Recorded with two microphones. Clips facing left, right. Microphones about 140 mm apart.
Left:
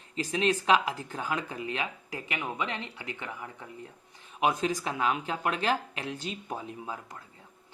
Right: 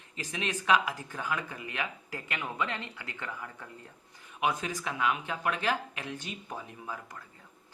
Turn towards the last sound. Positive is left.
turn(degrees=25)  # may be behind; listen again after turning